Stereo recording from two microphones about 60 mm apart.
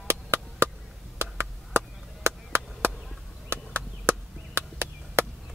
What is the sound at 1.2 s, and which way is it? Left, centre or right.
Chop, right.